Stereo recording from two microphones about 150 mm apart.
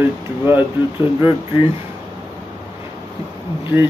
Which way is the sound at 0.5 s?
15° right (ahead or behind).